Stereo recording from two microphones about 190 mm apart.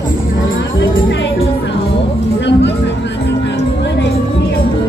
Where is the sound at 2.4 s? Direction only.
65° left (ahead or behind).